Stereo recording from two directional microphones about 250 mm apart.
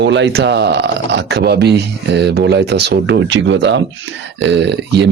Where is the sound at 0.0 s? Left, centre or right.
Right.